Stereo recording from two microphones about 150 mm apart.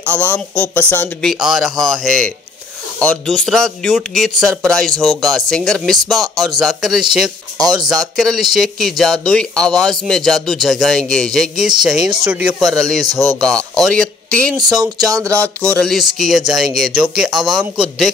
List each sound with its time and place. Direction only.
0.1 s speech: 10° left (ahead or behind)
1.4 s speech: centre (ahead or behind)
12.5 s speech: centre (ahead or behind)
13.0 s speech: 25° right (ahead or behind)
13.4 s speech: 5° left (ahead or behind)
14.6 s speech: 25° right (ahead or behind)
15.3 s speech: 10° left (ahead or behind)